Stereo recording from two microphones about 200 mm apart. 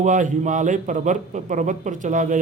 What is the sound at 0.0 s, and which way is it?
A man's voice, 40° right (ahead or behind).